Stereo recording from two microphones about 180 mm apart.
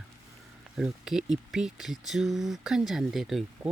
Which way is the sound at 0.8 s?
5° right (ahead or behind).